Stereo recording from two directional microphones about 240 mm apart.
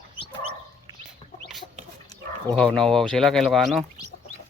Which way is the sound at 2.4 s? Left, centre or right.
Centre.